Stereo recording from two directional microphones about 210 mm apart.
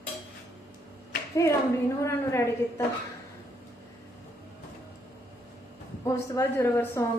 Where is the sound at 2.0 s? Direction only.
15° left (ahead or behind).